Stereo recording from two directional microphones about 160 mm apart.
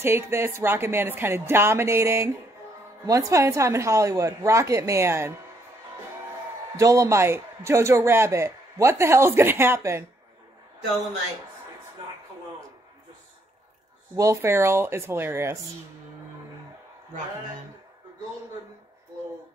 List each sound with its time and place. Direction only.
0.0 s a man's voice: 15° right (ahead or behind)
6.8 s a man's voice: 20° right (ahead or behind)
14.1 s a man's voice: 20° right (ahead or behind)